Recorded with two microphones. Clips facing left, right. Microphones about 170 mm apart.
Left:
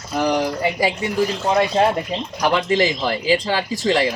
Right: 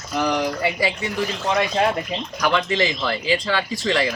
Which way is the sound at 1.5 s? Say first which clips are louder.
Left 2 dB; 25° left (ahead or behind).